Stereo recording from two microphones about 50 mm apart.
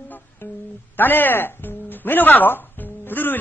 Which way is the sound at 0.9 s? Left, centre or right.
Left.